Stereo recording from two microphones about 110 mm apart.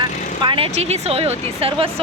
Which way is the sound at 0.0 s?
50° right (ahead or behind).